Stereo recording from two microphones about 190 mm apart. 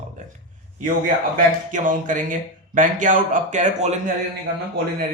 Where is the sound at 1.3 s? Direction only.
45° right (ahead or behind).